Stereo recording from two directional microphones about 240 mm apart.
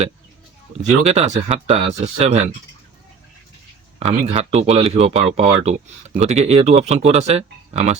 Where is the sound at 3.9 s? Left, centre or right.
Right.